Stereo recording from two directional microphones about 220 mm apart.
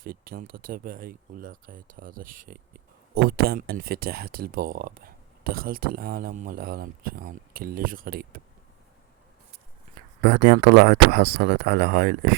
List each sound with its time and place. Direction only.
0.0 s speech: 40° right (ahead or behind)
10.2 s speech: 45° right (ahead or behind)